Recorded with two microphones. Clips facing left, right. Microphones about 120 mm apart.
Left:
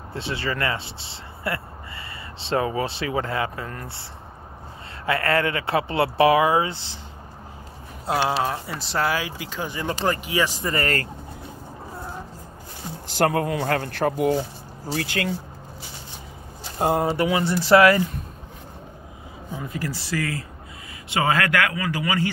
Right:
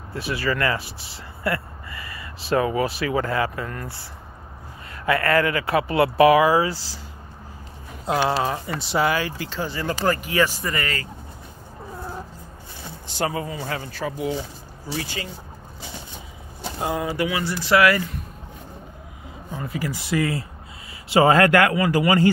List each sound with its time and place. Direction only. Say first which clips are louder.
0.1 s speech: right 3 dB; 25° left (ahead or behind)
5.0 s speech: right 2 dB; 30° left (ahead or behind)
8.3 s speech: right 1 dB; centre (ahead or behind); by 10.5 s 15° left (ahead or behind)
10.6 s speech: left 2 dB; 35° left (ahead or behind)
13.2 s a man's voice: left 5 dB; 60° left (ahead or behind)
16.8 s speech: left 5 dB; 50° left (ahead or behind)
17.1 s speech: left 3 dB; 25° left (ahead or behind)
19.5 s speech: right 1 dB; centre (ahead or behind)
19.8 s speech: right 5 dB; 20° right (ahead or behind)
21.1 s speech: right 6 dB; 35° right (ahead or behind)